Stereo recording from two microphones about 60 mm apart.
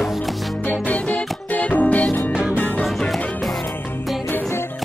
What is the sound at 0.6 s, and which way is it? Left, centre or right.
Music, left.